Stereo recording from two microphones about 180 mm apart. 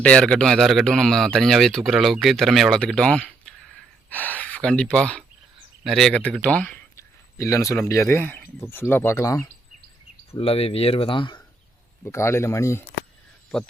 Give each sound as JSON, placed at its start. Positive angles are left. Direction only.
{"t": 0.0, "sound": "speech", "side_deg": 5}
{"t": 10.3, "sound": "speech", "side_deg": 35}
{"t": 12.0, "sound": "speech", "side_deg": 15}